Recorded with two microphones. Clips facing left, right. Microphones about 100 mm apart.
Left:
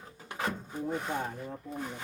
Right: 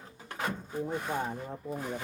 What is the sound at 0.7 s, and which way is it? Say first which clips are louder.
Speech: right 2 dB; 10° right (ahead or behind).